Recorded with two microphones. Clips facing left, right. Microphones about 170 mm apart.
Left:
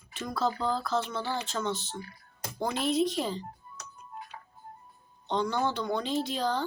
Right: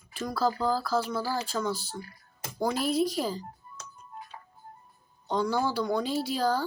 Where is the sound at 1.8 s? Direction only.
25° left (ahead or behind).